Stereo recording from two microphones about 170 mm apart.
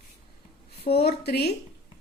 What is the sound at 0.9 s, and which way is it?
Speech, 70° left (ahead or behind).